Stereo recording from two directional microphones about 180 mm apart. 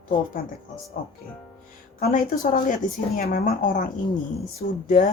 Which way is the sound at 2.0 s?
45° left (ahead or behind).